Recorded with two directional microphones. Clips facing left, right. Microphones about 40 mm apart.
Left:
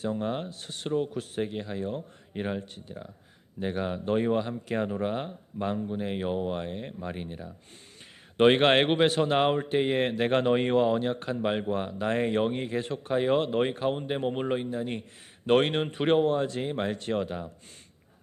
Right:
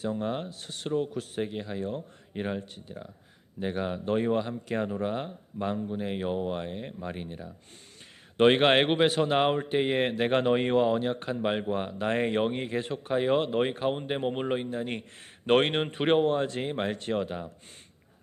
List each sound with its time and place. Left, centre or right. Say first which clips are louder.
0.0 s speech: left 1 dB; centre
1.4 s speech: left 1 dB; centre
4.9 s speech: left 1 dB; centre
9.6 s speech: even; centre
14.8 s a man's voice: even; right